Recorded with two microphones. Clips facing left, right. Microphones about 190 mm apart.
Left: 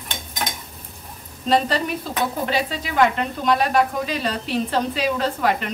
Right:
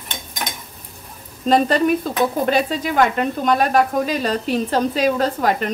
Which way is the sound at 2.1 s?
50° right (ahead or behind).